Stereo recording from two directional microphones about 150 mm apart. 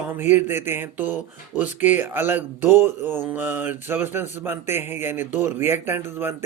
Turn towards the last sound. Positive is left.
turn(degrees=-15)  # may be behind; listen again after turning